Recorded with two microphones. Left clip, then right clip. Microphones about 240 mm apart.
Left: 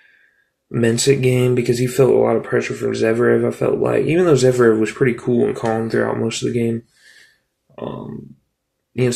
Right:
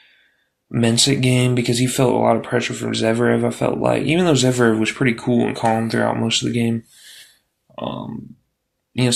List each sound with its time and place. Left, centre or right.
0.7 s speech: right